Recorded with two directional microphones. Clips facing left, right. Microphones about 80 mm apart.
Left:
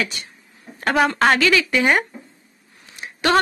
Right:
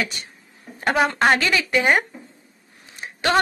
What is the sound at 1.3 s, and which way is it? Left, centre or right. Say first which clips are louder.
Speech: left 2 dB; right.